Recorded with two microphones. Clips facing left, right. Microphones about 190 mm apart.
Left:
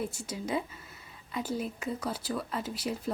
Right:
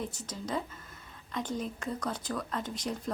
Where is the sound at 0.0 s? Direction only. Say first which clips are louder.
Left 3 dB; 10° left (ahead or behind).